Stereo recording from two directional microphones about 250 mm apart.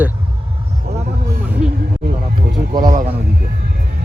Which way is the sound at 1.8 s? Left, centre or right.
Right.